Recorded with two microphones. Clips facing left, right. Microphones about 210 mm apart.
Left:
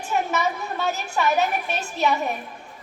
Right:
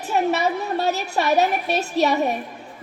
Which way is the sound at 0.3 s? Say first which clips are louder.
Right 4 dB; 35° right (ahead or behind).